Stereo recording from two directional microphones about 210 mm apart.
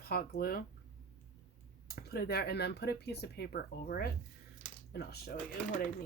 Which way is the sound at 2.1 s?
50° left (ahead or behind).